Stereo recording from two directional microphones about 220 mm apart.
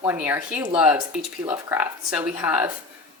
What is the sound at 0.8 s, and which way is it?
Speech, 5° right (ahead or behind).